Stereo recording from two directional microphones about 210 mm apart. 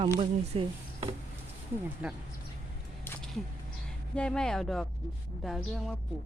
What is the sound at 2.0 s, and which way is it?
Speech, 5° right (ahead or behind).